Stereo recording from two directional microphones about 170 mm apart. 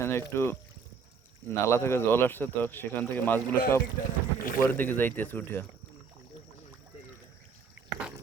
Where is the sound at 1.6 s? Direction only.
15° left (ahead or behind).